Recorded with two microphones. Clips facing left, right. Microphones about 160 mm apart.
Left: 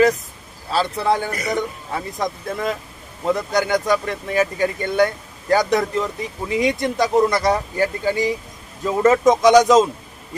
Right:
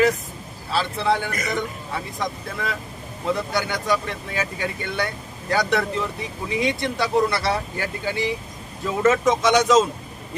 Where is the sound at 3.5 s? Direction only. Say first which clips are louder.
Left 5 dB; 45° left (ahead or behind).